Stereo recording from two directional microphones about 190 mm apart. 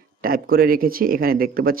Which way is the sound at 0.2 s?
50° right (ahead or behind).